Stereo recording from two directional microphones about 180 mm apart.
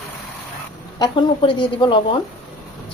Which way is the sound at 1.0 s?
30° left (ahead or behind).